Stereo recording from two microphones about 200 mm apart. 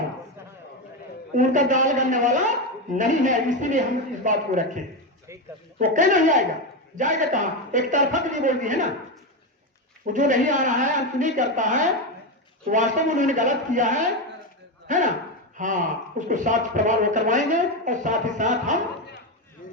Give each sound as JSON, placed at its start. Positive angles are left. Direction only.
{"t": 1.4, "sound": "speech", "side_deg": -40}
{"t": 5.9, "sound": "speech", "side_deg": -40}
{"t": 10.1, "sound": "a man's voice", "side_deg": -40}
{"t": 19.6, "sound": "boat", "side_deg": 45}